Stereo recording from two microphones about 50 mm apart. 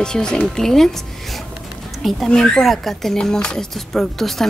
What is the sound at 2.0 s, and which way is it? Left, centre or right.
Speech, centre.